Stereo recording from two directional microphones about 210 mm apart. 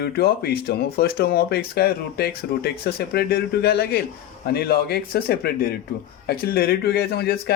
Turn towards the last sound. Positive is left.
turn(degrees=45)  # may be behind; listen again after turning